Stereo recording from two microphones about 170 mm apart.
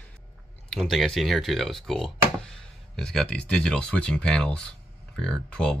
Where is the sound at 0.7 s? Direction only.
Centre (ahead or behind).